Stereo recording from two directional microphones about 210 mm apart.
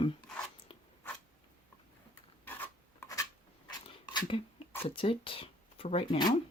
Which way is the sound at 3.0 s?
15° left (ahead or behind).